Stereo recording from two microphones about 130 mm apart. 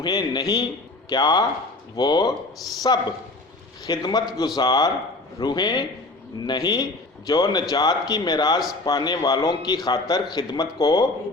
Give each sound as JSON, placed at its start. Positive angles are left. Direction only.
{"t": 0.0, "sound": "a man's voice", "side_deg": 35}